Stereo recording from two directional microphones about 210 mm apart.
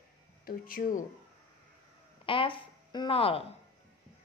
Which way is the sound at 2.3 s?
25° left (ahead or behind).